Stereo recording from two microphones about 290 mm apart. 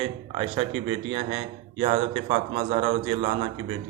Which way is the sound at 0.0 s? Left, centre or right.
Right.